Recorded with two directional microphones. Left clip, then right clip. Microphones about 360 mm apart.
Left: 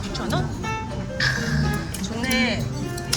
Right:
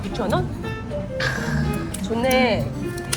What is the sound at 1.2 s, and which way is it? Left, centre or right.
Music, centre.